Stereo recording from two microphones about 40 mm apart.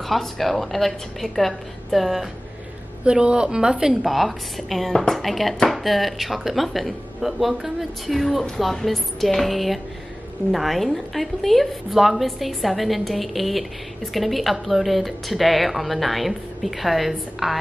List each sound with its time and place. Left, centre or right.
0.1 s speech: centre
3.1 s a woman's voice: right
4.0 s speech: centre